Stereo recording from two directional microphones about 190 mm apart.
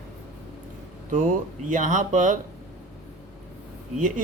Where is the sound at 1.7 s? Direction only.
40° right (ahead or behind).